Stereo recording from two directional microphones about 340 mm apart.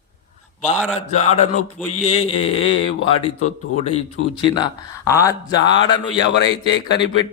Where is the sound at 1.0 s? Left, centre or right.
Centre.